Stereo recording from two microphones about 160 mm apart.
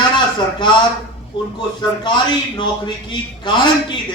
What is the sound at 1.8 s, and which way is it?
A man's voice, 30° left (ahead or behind).